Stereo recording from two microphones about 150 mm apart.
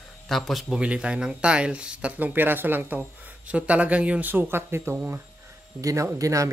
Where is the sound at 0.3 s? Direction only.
Centre (ahead or behind).